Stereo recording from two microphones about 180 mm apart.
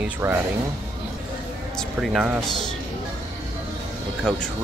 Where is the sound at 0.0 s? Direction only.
15° right (ahead or behind).